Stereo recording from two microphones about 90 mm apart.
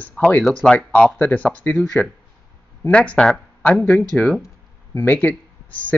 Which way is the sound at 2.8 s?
15° left (ahead or behind).